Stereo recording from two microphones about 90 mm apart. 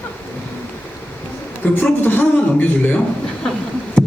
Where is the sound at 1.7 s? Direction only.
20° left (ahead or behind).